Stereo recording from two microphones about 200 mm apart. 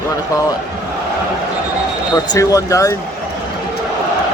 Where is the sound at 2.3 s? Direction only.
15° left (ahead or behind).